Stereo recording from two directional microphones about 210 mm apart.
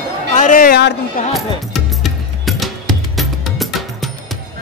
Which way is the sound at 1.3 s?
Centre (ahead or behind).